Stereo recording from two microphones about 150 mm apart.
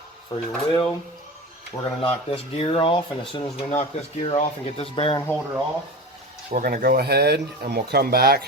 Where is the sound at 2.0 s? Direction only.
35° left (ahead or behind).